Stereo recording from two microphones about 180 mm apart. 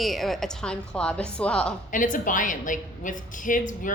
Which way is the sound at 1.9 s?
45° left (ahead or behind).